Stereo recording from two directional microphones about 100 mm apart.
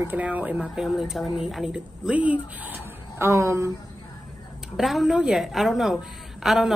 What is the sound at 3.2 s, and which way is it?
Speech, 30° right (ahead or behind).